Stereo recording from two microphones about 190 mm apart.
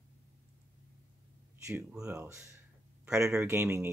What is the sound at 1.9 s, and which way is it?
Speech, 10° right (ahead or behind).